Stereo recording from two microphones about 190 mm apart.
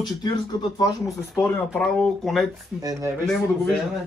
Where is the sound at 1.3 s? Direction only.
10° left (ahead or behind).